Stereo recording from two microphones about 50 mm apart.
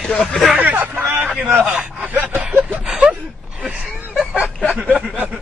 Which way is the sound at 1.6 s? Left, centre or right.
Right.